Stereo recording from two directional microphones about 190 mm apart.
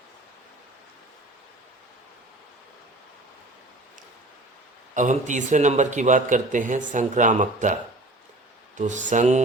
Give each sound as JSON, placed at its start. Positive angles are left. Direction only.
{"t": 4.9, "sound": "a man's voice", "side_deg": -40}
{"t": 8.8, "sound": "a man's voice", "side_deg": -40}